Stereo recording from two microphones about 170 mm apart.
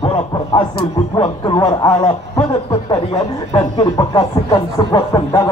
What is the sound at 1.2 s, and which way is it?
Speech, 25° left (ahead or behind).